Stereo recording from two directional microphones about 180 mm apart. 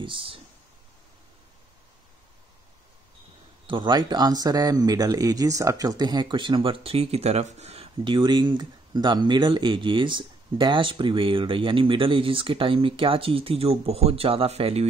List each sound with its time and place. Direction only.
0.0 s speech: 30° right (ahead or behind)
3.6 s speech: 25° right (ahead or behind)